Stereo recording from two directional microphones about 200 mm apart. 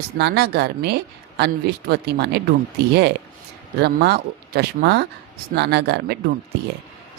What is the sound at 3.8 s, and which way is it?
Speech, 55° right (ahead or behind).